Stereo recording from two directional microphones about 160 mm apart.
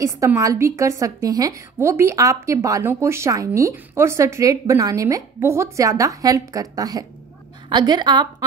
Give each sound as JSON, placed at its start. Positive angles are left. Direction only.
{"t": 0.0, "sound": "a woman's voice", "side_deg": -20}